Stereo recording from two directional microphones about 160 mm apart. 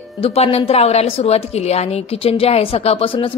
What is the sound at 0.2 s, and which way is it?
A woman's voice, 40° left (ahead or behind).